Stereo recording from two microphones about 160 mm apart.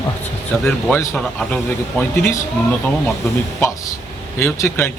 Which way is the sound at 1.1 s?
10° left (ahead or behind).